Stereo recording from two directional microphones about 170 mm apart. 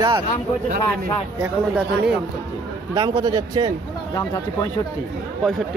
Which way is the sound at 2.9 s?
25° right (ahead or behind).